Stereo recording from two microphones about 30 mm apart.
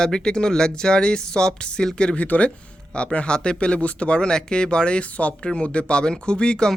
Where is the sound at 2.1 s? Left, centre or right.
Left.